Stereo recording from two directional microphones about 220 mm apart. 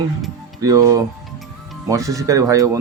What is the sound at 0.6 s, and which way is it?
Speech, 15° right (ahead or behind).